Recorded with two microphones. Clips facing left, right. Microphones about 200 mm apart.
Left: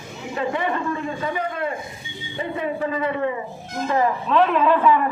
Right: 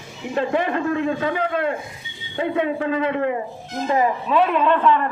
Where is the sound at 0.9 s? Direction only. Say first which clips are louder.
Right 4 dB; 75° right (ahead or behind).